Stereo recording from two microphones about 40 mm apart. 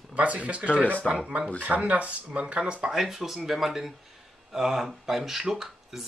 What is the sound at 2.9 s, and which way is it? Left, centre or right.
Speech, centre.